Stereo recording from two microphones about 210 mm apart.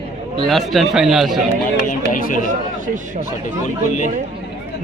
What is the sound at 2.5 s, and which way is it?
Speech, 40° right (ahead or behind).